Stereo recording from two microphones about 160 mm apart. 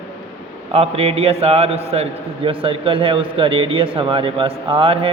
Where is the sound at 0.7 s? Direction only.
40° right (ahead or behind).